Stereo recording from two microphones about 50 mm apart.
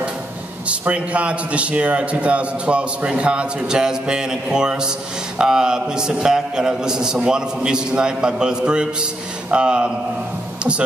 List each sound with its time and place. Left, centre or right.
0.7 s a man's voice: right